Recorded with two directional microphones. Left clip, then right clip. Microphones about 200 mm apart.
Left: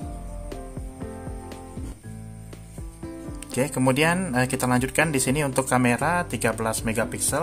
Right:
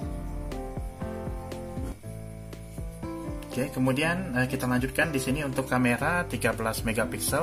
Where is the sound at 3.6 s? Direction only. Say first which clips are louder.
Left 6 dB; 35° left (ahead or behind).